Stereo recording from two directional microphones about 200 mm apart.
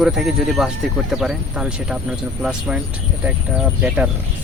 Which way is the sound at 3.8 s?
5° right (ahead or behind).